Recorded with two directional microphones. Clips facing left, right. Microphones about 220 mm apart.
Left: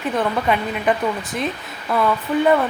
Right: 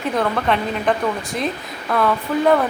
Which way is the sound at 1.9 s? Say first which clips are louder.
Even; 5° left (ahead or behind).